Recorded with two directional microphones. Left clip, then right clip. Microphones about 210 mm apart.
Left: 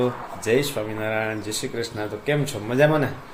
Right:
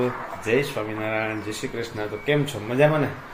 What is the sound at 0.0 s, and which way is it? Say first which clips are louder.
Speech: left 1 dB; 15° left (ahead or behind).